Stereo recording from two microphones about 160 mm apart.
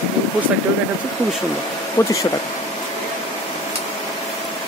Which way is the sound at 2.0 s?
20° left (ahead or behind).